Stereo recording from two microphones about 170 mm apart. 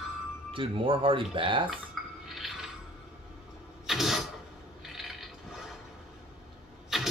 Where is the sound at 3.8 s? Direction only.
Centre (ahead or behind).